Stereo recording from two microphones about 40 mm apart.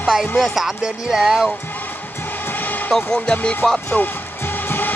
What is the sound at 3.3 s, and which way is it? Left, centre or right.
Speech, left.